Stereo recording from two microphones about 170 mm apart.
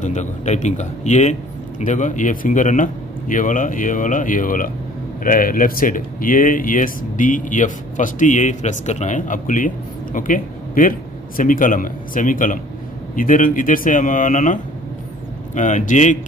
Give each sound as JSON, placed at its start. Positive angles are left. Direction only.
{"t": 0.0, "sound": "a man's voice", "side_deg": 45}